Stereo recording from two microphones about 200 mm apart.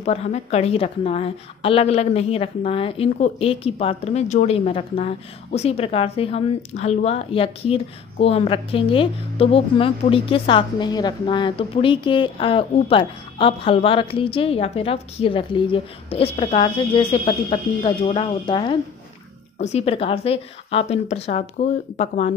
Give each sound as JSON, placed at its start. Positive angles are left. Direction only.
{"t": 0.0, "sound": "a woman's voice", "side_deg": 30}